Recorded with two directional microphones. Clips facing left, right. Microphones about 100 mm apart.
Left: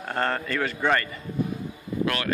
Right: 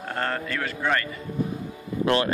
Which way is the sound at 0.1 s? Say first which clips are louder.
Left 2 dB; centre (ahead or behind).